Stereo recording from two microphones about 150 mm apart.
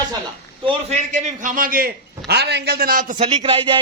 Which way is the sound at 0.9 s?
55° right (ahead or behind).